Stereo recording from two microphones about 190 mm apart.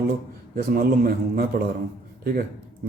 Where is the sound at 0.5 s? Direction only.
50° right (ahead or behind).